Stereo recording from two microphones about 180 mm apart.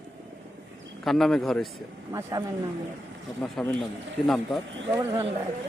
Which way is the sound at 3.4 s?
5° left (ahead or behind).